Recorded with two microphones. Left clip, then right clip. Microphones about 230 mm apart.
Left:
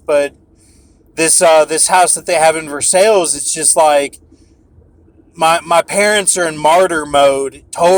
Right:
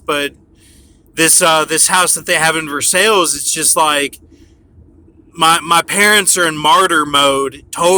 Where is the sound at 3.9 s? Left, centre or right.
Right.